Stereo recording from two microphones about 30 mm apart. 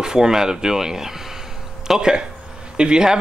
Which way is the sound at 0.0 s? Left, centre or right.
Right.